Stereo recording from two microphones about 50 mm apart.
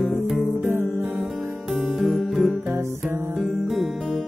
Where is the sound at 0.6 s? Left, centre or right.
Right.